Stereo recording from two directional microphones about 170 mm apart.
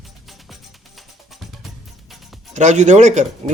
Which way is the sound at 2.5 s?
45° right (ahead or behind).